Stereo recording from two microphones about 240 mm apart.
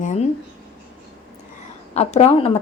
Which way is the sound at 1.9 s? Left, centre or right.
Left.